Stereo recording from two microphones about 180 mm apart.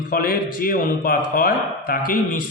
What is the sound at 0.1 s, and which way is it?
A man's voice, 55° left (ahead or behind).